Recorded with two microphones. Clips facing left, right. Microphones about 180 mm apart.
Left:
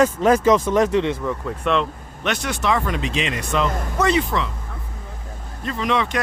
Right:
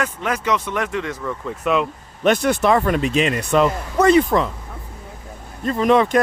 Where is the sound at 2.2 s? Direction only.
50° right (ahead or behind).